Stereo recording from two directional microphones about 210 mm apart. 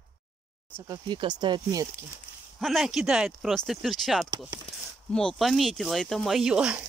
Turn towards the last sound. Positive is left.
turn(degrees=-5)  # may be behind; listen again after turning